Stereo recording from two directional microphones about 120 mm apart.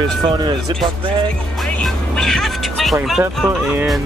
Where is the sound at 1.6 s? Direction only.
10° left (ahead or behind).